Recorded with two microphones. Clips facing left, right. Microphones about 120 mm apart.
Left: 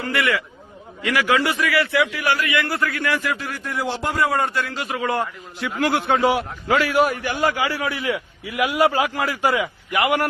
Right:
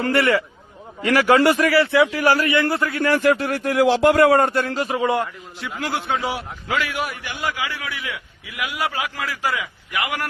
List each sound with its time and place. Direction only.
0.1 s a man's voice: 30° right (ahead or behind)
1.0 s a man's voice: 40° right (ahead or behind)
1.7 s a man's voice: 30° right (ahead or behind)
3.0 s a man's voice: 40° right (ahead or behind)
3.2 s a man's voice: 55° right (ahead or behind)
4.7 s a man's voice: 35° right (ahead or behind)
5.5 s a man's voice: 60° left (ahead or behind)
6.7 s a man's voice: 40° left (ahead or behind)